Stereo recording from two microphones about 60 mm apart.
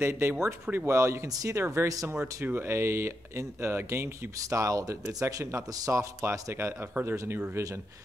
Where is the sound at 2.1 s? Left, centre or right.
Right.